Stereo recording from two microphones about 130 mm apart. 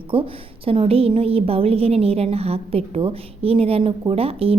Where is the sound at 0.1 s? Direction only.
45° right (ahead or behind).